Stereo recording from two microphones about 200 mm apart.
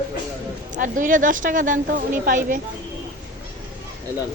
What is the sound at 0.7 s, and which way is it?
A woman's voice, 40° right (ahead or behind).